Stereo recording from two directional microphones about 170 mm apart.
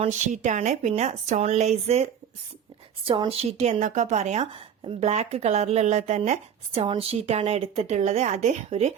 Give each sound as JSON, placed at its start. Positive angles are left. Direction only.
{"t": 0.0, "sound": "a woman's voice", "side_deg": -45}
{"t": 3.1, "sound": "a woman's voice", "side_deg": -35}